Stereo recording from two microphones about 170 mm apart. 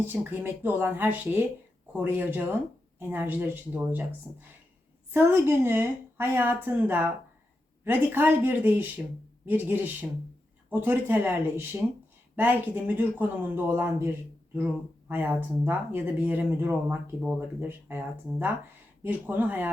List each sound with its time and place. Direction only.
0.0 s speech: 10° right (ahead or behind)